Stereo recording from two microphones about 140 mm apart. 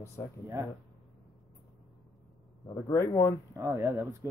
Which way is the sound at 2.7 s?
20° left (ahead or behind).